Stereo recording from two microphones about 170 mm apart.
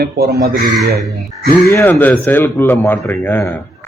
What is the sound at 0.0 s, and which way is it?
Speech, 70° right (ahead or behind).